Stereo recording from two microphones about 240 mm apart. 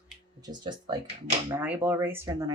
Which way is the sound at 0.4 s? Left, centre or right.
Centre.